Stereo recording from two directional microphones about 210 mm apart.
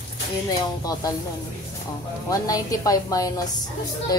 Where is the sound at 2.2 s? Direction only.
15° left (ahead or behind).